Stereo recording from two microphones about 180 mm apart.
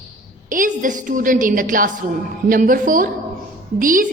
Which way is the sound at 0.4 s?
50° right (ahead or behind).